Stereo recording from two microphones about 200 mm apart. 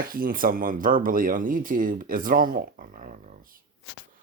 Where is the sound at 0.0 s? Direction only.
45° right (ahead or behind).